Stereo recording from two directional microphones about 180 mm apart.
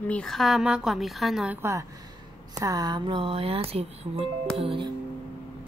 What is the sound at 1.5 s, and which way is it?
A woman's voice, 15° right (ahead or behind).